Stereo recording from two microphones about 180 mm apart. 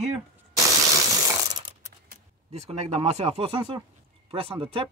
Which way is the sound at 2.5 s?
35° right (ahead or behind).